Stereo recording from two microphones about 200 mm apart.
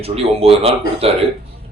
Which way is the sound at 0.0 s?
30° right (ahead or behind).